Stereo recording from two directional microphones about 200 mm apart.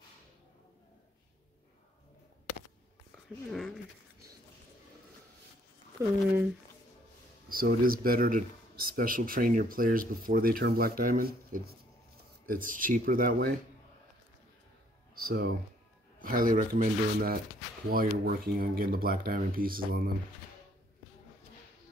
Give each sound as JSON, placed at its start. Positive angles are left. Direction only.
{"t": 3.5, "sound": "speech", "side_deg": 0}
{"t": 6.0, "sound": "speech", "side_deg": -15}
{"t": 7.4, "sound": "speech", "side_deg": -45}
{"t": 15.2, "sound": "speech", "side_deg": -50}